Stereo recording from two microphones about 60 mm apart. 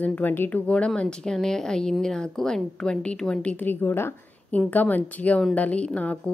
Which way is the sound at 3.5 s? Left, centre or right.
Left.